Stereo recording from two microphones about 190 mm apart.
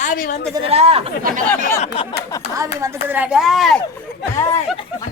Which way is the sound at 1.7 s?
30° left (ahead or behind).